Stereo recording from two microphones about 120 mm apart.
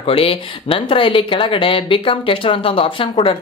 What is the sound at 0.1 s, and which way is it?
Speech, 50° left (ahead or behind).